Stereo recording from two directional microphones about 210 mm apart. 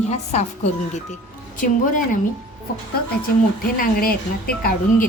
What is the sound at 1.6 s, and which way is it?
Speech, 40° left (ahead or behind).